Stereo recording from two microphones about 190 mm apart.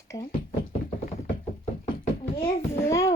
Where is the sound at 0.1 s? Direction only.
20° left (ahead or behind).